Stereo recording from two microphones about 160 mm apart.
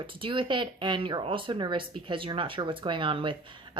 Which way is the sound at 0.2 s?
30° right (ahead or behind).